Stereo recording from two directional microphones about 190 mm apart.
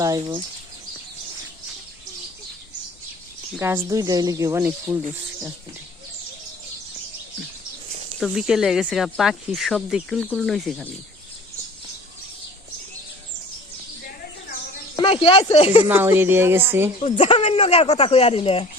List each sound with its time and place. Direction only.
0.0 s speech: 20° right (ahead or behind)
3.6 s speech: 15° right (ahead or behind)
8.2 s speech: centre (ahead or behind)
14.9 s speech: 25° left (ahead or behind)
15.9 s speech: 10° right (ahead or behind)
17.0 s speech: 30° left (ahead or behind)